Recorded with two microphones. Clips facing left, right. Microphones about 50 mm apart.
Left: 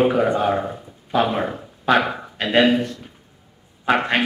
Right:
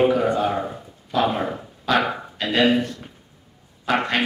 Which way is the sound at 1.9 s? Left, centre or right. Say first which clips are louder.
Left 3 dB; left.